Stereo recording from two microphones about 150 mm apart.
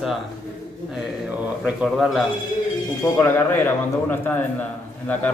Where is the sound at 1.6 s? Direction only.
5° right (ahead or behind).